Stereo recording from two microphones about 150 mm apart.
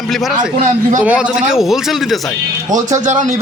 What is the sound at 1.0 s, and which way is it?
A man's voice, 10° right (ahead or behind).